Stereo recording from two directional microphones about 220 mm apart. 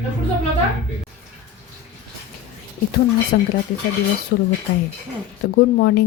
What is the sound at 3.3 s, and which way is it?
Speech, 40° left (ahead or behind).